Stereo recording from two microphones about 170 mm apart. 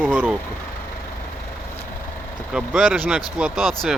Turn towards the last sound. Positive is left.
turn(degrees=0)  # may be behind; listen again after turning